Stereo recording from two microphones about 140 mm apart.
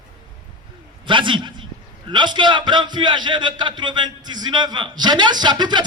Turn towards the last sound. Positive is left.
turn(degrees=-30)  # may be behind; listen again after turning